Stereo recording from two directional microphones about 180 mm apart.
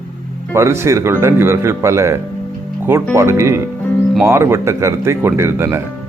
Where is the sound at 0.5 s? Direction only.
15° right (ahead or behind).